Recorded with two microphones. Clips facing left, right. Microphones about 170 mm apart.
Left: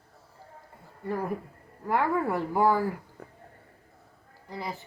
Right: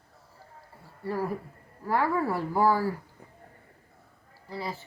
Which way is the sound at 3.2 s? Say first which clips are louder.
Left 5 dB; 65° left (ahead or behind).